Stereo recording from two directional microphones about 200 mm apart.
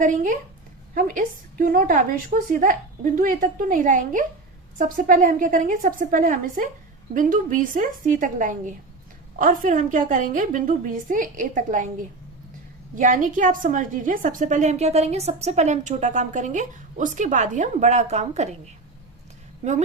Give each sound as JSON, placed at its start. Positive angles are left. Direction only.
{"t": 0.0, "sound": "a woman's voice", "side_deg": -40}
{"t": 13.0, "sound": "a woman's voice", "side_deg": -40}